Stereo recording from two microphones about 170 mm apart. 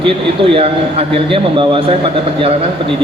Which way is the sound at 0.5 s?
35° right (ahead or behind).